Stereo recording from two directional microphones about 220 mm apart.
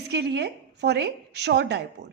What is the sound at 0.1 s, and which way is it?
A woman's voice, 50° right (ahead or behind).